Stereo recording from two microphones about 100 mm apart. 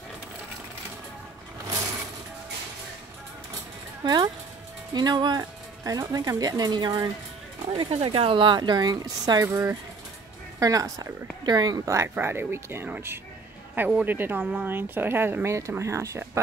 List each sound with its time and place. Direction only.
4.0 s speech: 50° right (ahead or behind)
7.7 s speech: 65° right (ahead or behind); by 9.5 s 40° right (ahead or behind)
9.5 s speech: 25° right (ahead or behind); by 11.9 s 40° right (ahead or behind)
11.9 s speech: 25° right (ahead or behind)